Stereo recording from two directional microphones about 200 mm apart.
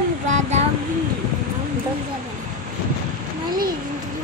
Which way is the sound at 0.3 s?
35° right (ahead or behind).